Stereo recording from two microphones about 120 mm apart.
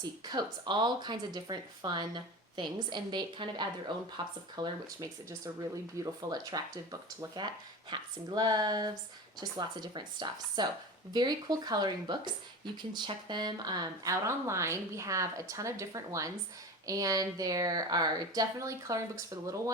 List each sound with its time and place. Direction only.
0.0 s speech: 35° right (ahead or behind)